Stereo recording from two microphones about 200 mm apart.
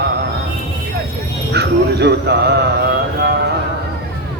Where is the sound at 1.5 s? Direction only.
55° right (ahead or behind).